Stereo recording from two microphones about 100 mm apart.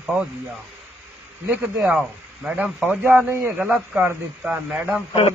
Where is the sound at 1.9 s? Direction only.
10° right (ahead or behind).